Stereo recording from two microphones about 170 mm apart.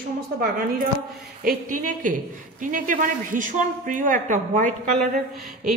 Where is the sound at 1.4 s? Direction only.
50° right (ahead or behind).